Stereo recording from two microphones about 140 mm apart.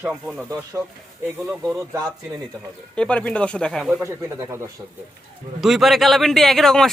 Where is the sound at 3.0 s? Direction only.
10° left (ahead or behind).